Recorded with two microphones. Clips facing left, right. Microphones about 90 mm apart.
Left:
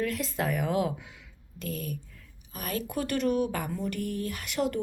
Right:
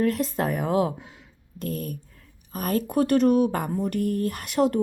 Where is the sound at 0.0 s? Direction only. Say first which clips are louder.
Right 6 dB; 40° right (ahead or behind).